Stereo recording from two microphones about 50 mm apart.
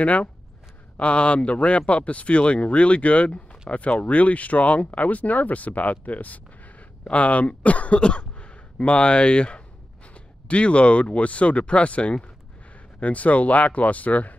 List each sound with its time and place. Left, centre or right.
0.0 s speech: left